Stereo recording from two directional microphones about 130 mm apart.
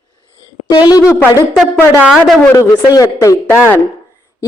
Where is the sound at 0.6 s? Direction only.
30° left (ahead or behind).